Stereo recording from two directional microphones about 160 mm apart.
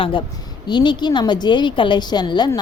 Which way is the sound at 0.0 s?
30° left (ahead or behind).